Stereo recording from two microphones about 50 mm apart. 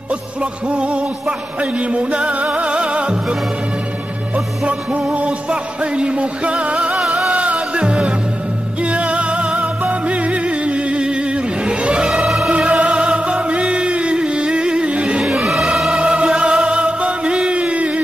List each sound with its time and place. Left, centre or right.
0.4 s music: right
5.1 s music: right
7.2 s music: centre
12.1 s music: centre
12.4 s music: right
15.1 s music: centre
16.0 s music: centre